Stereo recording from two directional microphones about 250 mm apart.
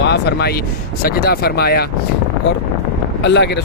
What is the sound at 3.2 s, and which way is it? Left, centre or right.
Speech, left.